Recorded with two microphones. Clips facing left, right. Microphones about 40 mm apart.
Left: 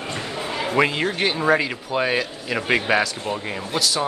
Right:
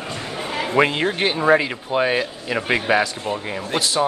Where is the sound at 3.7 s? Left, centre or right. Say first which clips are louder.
Right 2 dB; right.